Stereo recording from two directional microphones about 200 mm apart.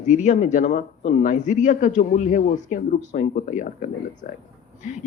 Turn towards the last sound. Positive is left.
turn(degrees=40)  # may be behind; listen again after turning